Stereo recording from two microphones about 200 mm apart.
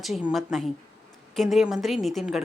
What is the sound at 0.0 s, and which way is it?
A woman's voice, 5° right (ahead or behind).